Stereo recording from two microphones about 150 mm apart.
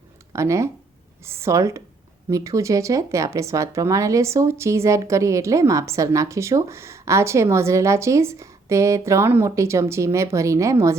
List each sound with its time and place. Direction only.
0.3 s speech: 20° right (ahead or behind)